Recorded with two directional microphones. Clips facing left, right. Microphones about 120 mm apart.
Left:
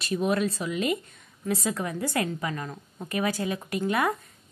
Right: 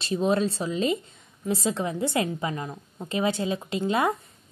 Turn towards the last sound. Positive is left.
turn(degrees=-25)  # may be behind; listen again after turning